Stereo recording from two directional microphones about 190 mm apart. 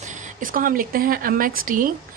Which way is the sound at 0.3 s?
45° right (ahead or behind).